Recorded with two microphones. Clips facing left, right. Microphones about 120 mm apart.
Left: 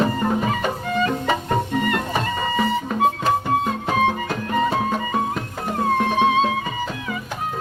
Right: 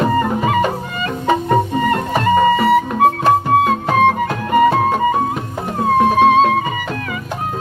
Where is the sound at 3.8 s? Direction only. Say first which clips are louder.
Right 6 dB; 40° right (ahead or behind).